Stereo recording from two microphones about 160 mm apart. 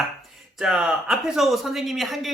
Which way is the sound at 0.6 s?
5° right (ahead or behind).